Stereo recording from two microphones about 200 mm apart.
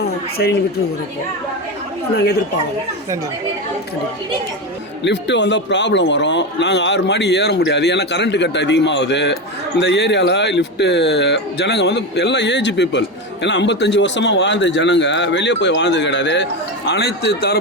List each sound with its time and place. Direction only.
0.0 s a sound: 55° left (ahead or behind)
2.1 s speech: 55° left (ahead or behind)
5.0 s speech: 60° left (ahead or behind)